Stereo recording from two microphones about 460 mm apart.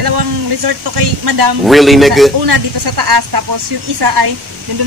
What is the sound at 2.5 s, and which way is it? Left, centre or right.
Speech, right.